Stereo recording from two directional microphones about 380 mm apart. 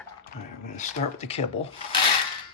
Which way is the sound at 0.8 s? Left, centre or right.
Centre.